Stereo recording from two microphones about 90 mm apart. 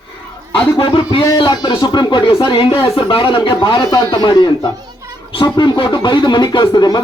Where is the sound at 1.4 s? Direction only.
50° left (ahead or behind).